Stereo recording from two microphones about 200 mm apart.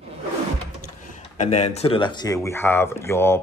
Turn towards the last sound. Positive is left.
turn(degrees=10)  # may be behind; listen again after turning